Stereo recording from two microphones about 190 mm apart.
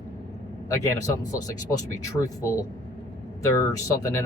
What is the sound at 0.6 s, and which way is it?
Speech, 15° left (ahead or behind).